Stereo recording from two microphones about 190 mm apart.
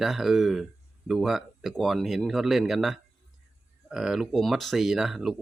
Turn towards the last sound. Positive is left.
turn(degrees=0)  # may be behind; listen again after turning